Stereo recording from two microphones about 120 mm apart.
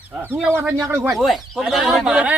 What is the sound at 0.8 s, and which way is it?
Speech, 20° right (ahead or behind).